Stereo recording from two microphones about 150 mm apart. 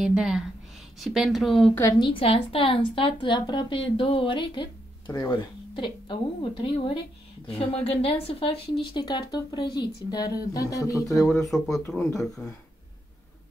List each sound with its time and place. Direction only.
0.0 s a woman's voice: 5° right (ahead or behind)
2.0 s a woman's voice: 35° left (ahead or behind); by 11.2 s 20° left (ahead or behind)
11.2 s a woman's voice: centre (ahead or behind)